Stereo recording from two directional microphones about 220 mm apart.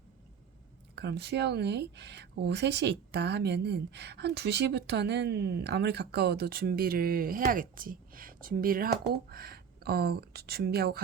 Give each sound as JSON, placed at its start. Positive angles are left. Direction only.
{"t": 0.9, "sound": "speech", "side_deg": -50}